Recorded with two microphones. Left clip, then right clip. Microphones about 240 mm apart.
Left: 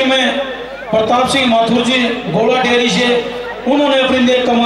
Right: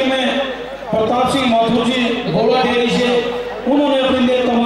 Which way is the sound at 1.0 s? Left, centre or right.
Centre.